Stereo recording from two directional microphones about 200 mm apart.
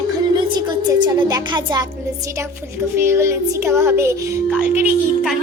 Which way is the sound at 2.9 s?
15° right (ahead or behind).